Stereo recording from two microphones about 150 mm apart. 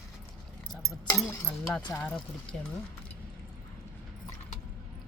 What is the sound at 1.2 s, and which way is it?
Speech, 10° left (ahead or behind).